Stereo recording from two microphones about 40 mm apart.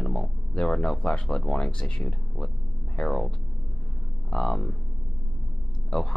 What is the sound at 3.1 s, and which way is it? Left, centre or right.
Speech, centre.